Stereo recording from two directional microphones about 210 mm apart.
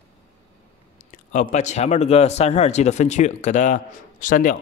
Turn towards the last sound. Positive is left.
turn(degrees=40)  # may be behind; listen again after turning